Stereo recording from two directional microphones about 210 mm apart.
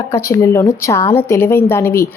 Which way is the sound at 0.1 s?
15° left (ahead or behind).